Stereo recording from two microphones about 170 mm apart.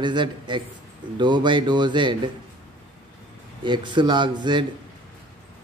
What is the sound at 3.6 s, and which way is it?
Speech, 30° right (ahead or behind).